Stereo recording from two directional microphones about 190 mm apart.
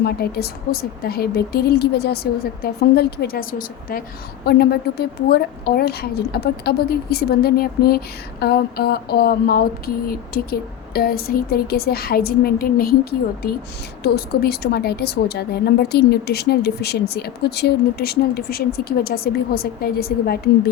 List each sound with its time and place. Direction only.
0.0 s a woman's voice: 55° left (ahead or behind)